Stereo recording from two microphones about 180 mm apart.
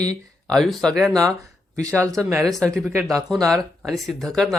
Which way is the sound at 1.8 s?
15° right (ahead or behind).